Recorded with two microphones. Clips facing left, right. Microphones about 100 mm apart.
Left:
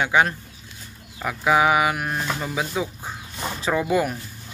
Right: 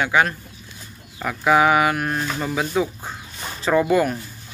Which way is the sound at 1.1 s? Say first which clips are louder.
Right 2 dB; 10° left (ahead or behind).